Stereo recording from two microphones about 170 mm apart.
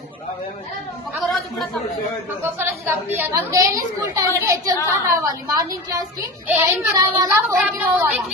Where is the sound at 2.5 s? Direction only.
10° right (ahead or behind).